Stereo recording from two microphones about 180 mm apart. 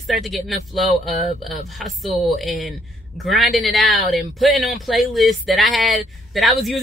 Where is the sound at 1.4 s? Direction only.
Centre (ahead or behind).